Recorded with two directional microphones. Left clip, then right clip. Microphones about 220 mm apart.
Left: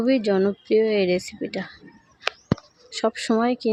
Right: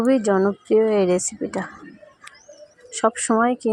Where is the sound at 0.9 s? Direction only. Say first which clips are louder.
Right 3 dB; 35° right (ahead or behind).